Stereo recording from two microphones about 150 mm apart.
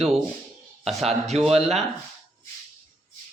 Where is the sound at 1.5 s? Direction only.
45° right (ahead or behind).